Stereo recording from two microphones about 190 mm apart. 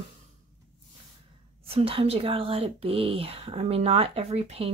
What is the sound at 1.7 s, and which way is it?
Speech, 30° right (ahead or behind).